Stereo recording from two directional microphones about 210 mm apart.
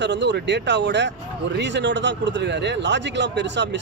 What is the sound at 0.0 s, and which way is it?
A man's voice, 55° right (ahead or behind).